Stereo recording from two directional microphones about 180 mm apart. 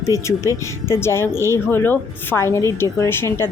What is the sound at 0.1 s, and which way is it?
Speech, 15° left (ahead or behind).